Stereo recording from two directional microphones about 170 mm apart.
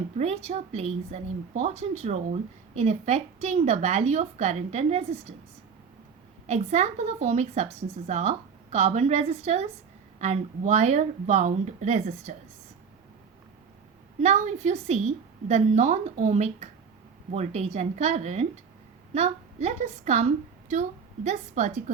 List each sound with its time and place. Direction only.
0.2 s a woman's voice: 40° right (ahead or behind)
6.5 s a woman's voice: 40° right (ahead or behind)
14.2 s a woman's voice: 40° right (ahead or behind)